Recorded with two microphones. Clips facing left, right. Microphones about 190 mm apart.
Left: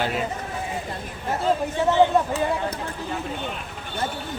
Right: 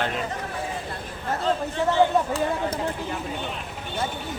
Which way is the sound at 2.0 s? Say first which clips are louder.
Left 2 dB; 20° left (ahead or behind).